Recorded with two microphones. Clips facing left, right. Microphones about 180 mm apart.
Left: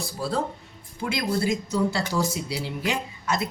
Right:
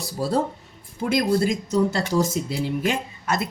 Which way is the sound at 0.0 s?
40° right (ahead or behind).